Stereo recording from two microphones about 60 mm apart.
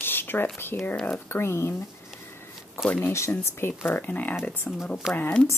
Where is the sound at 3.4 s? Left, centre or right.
Left.